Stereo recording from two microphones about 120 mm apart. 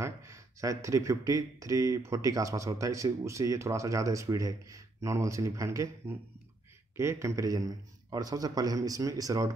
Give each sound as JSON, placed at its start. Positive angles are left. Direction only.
{"t": 0.0, "sound": "speech", "side_deg": -25}